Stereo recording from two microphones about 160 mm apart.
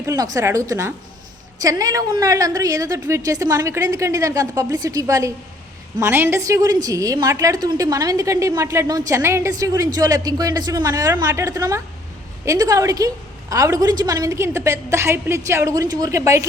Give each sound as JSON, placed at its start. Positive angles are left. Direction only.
{"t": 0.0, "sound": "a woman's voice", "side_deg": -20}